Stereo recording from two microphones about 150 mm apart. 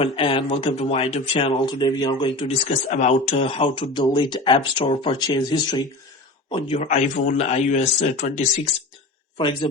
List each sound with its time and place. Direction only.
0.0 s speech: 35° left (ahead or behind)
6.5 s a man's voice: 40° left (ahead or behind)
9.4 s speech: 35° left (ahead or behind)